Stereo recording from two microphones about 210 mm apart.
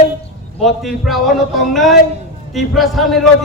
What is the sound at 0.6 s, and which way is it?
A man's voice, centre (ahead or behind).